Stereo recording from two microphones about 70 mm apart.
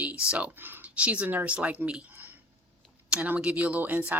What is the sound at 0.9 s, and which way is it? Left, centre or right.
Speech, centre.